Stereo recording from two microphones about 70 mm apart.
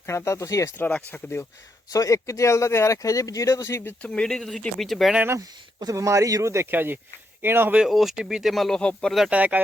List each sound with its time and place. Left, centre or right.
0.3 s speech: left
0.8 s speech: left
1.1 s speech: left
1.9 s speech: left
4.0 s speech: centre
5.8 s speech: right
6.7 s speech: right
7.9 s speech: centre
9.3 s speech: right